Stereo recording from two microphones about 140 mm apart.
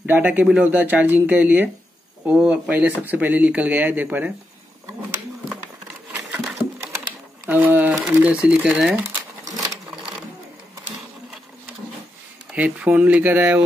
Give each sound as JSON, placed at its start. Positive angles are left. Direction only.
{"t": 0.0, "sound": "speech", "side_deg": -10}
{"t": 6.1, "sound": "a sound", "side_deg": -15}
{"t": 7.4, "sound": "speech", "side_deg": -10}
{"t": 9.5, "sound": "sewing machine", "side_deg": -25}
{"t": 12.5, "sound": "speech", "side_deg": -10}